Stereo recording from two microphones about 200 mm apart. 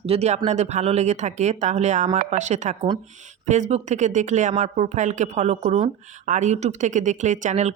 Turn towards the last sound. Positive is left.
turn(degrees=-35)  # may be behind; listen again after turning